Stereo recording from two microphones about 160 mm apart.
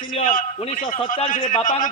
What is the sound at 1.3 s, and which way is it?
Speech, 55° left (ahead or behind).